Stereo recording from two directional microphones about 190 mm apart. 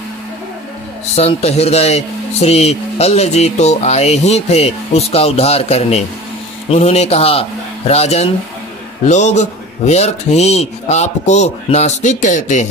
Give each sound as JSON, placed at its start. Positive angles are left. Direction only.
{"t": 1.1, "sound": "speech", "side_deg": 35}